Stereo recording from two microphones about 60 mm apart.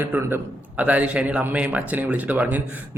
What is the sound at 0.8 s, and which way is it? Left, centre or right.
A man's voice, right.